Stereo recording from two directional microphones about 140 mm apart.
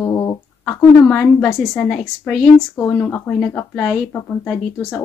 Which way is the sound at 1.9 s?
5° left (ahead or behind).